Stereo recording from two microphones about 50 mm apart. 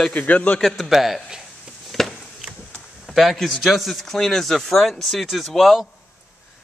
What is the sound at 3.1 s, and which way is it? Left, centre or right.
Speech, centre.